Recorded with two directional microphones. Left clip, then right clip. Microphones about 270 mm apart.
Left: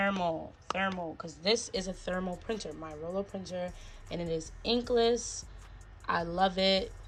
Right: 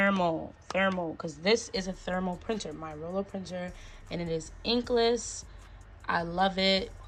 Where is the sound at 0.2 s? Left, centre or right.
Centre.